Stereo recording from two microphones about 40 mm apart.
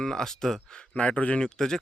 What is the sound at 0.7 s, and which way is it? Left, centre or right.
Speech, left.